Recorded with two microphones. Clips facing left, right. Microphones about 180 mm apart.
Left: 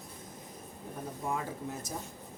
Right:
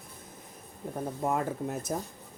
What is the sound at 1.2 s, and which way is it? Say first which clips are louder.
Speech: right 6 dB; 55° right (ahead or behind).